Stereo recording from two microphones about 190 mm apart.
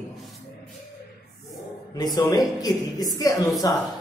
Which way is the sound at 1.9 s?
20° left (ahead or behind).